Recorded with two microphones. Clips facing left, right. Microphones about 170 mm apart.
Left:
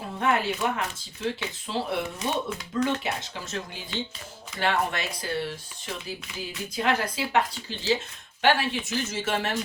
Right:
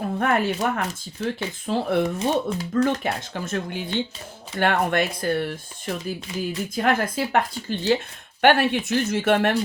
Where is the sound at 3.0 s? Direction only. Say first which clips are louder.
Right 5 dB; 50° right (ahead or behind).